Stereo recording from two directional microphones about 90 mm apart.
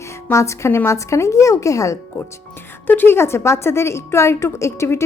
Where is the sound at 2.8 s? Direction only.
20° left (ahead or behind).